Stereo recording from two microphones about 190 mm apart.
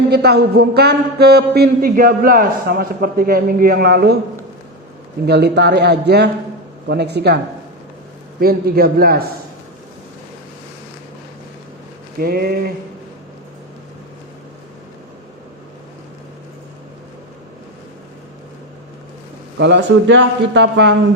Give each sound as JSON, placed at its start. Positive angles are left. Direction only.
{"t": 0.1, "sound": "speech", "side_deg": -60}
{"t": 5.2, "sound": "speech", "side_deg": -60}
{"t": 8.4, "sound": "a man's voice", "side_deg": -55}
{"t": 12.2, "sound": "a man's voice", "side_deg": -55}
{"t": 19.5, "sound": "a man's voice", "side_deg": -65}